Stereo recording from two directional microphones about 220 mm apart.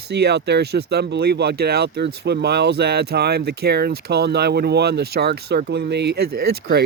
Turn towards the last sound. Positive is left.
turn(degrees=-50)  # may be behind; listen again after turning